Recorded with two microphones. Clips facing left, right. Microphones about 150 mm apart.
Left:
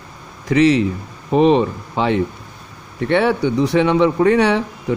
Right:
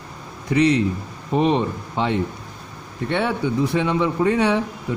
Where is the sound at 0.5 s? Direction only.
90° left.